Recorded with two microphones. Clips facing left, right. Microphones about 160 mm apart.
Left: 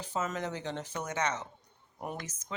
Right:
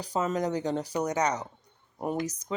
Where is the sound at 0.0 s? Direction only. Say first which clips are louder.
Right 6 dB; 35° right (ahead or behind).